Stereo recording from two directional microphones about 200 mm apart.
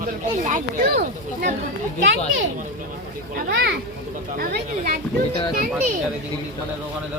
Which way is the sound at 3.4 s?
55° right (ahead or behind).